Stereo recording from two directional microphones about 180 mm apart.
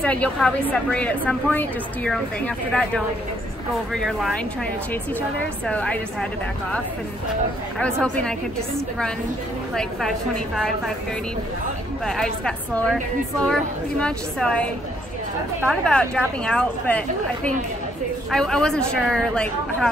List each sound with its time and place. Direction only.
0.0 s a woman's voice: 5° left (ahead or behind)
5.7 s a woman's voice: 5° left (ahead or behind)
7.8 s speech: 5° left (ahead or behind)
9.8 s speech: centre (ahead or behind)
12.1 s speech: 5° left (ahead or behind)
15.7 s a woman's voice: 5° left (ahead or behind)
18.3 s speech: 5° left (ahead or behind)